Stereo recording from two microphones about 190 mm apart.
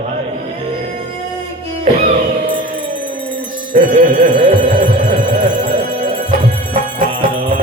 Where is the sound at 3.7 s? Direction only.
45° right (ahead or behind).